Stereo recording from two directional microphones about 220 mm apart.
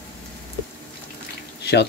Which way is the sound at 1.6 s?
50° left (ahead or behind).